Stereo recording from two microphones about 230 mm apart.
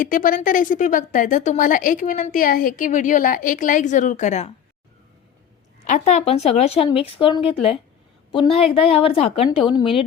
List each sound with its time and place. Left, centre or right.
0.0 s speech: left
5.8 s speech: left